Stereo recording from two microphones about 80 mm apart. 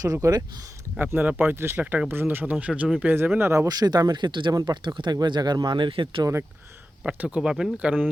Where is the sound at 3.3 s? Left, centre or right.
Right.